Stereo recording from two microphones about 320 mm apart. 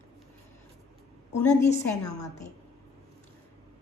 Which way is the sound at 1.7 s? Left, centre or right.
Left.